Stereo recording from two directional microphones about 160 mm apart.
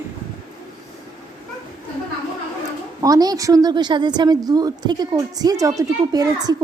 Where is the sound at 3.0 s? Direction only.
25° right (ahead or behind).